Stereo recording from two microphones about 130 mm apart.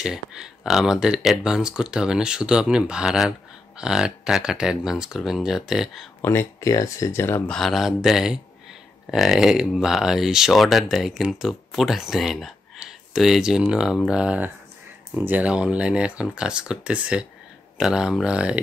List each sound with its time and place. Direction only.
0.0 s speech: 5° right (ahead or behind)
6.2 s speech: 20° left (ahead or behind)
7.5 s speech: centre (ahead or behind)